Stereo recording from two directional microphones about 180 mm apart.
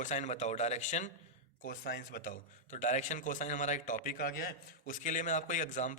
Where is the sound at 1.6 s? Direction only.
55° left (ahead or behind).